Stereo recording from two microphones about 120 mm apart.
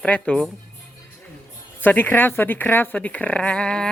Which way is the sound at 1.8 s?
15° left (ahead or behind).